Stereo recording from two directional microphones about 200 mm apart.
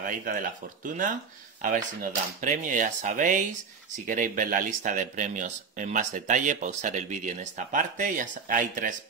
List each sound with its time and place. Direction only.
0.0 s speech: 40° right (ahead or behind)